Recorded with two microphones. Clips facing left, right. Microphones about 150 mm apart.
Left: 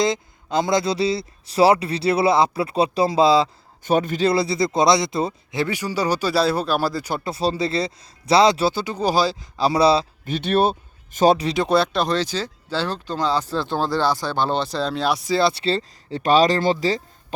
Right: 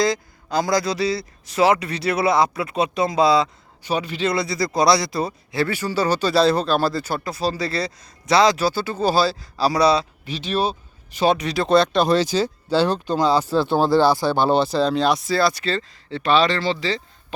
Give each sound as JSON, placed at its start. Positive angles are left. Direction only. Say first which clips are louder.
{"t": 0.0, "sound": "speech", "louder": "even", "side_deg": 25}
{"t": 3.8, "sound": "a man's voice", "louder": "left 4 dB", "side_deg": 50}
{"t": 4.3, "sound": "speech", "louder": "even", "side_deg": 30}
{"t": 7.3, "sound": "speech", "louder": "left 2 dB", "side_deg": 30}
{"t": 10.2, "sound": "speech", "louder": "left 6 dB", "side_deg": 55}
{"t": 11.3, "sound": "speech", "louder": "left 1 dB", "side_deg": 25}
{"t": 11.6, "sound": "speech", "louder": "right 5 dB", "side_deg": 10}
{"t": 12.0, "sound": "speech", "louder": "right 5 dB", "side_deg": -10}
{"t": 15.3, "sound": "speech", "louder": "left 1 dB", "side_deg": 25}